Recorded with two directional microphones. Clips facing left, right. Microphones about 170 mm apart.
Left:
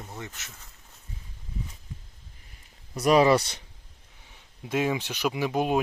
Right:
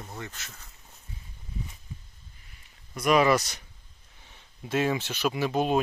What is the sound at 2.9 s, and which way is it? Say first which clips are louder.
Speech: left 2 dB; 35° left (ahead or behind).